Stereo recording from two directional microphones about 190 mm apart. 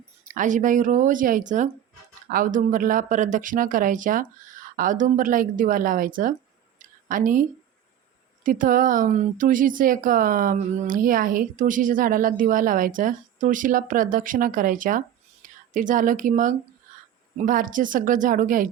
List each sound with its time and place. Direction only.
0.3 s speech: 40° right (ahead or behind)
6.7 s a sound: 45° right (ahead or behind)
8.4 s speech: 45° right (ahead or behind)